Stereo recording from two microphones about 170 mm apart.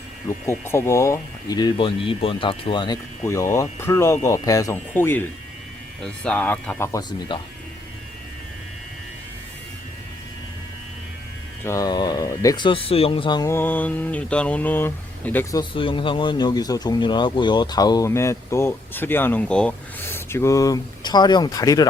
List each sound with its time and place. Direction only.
0.4 s speech: 15° left (ahead or behind)
11.6 s speech: 20° left (ahead or behind)
13.5 s speech: 10° left (ahead or behind)
15.5 s speech: 30° left (ahead or behind)